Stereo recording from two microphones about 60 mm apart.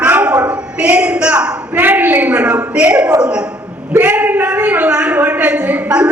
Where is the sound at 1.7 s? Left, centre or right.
Right.